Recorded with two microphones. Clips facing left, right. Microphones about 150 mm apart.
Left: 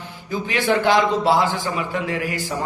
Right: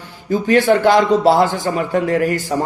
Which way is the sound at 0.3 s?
45° right (ahead or behind).